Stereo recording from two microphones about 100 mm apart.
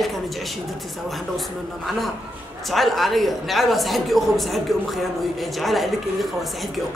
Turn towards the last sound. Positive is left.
turn(degrees=0)  # may be behind; listen again after turning